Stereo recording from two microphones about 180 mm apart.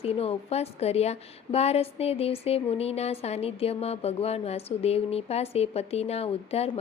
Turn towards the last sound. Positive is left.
turn(degrees=35)  # may be behind; listen again after turning